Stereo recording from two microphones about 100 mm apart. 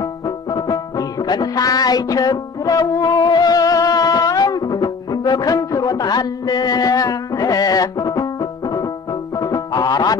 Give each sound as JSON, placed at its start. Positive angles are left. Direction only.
{"t": 0.5, "sound": "music", "side_deg": 40}